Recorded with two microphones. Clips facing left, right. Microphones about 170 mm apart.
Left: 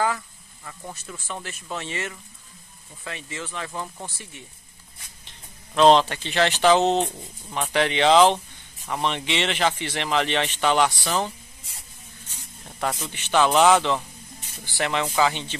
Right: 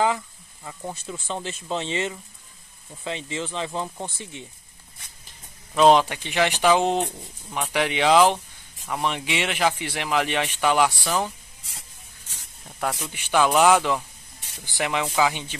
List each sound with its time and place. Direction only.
0.7 s speech: 20° right (ahead or behind)
5.8 s speech: 10° right (ahead or behind)
12.8 s speech: 10° right (ahead or behind)